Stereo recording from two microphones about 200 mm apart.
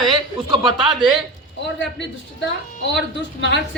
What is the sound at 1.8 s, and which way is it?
A man's voice, 65° left (ahead or behind).